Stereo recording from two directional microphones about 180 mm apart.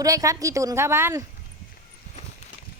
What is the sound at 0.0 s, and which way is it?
Speech, 20° right (ahead or behind).